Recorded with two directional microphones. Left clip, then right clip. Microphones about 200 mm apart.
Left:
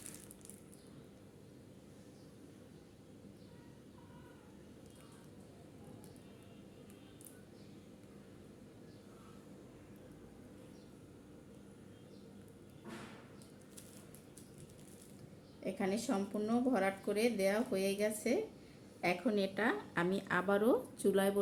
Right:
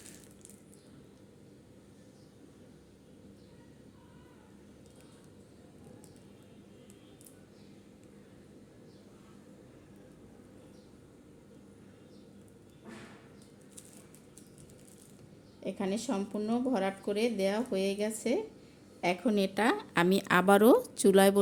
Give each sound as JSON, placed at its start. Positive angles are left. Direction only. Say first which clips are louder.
{"t": 15.6, "sound": "speech", "louder": "right 3 dB", "side_deg": -35}
{"t": 19.0, "sound": "a woman's voice", "louder": "right 5 dB", "side_deg": -50}